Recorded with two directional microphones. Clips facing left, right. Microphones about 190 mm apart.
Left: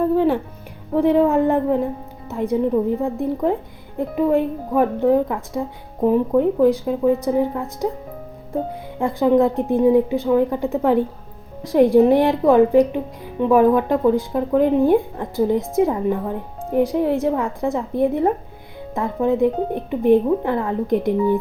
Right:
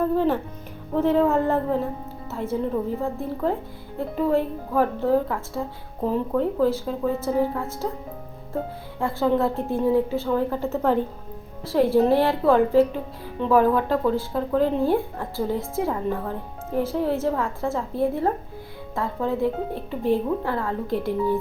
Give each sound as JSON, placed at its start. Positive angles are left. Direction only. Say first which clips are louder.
{"t": 0.9, "sound": "speech", "louder": "left 4 dB", "side_deg": 15}
{"t": 9.0, "sound": "speech", "louder": "left 6 dB", "side_deg": 15}